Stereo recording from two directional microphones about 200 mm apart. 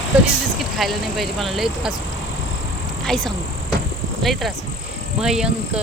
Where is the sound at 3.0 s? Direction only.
Centre (ahead or behind).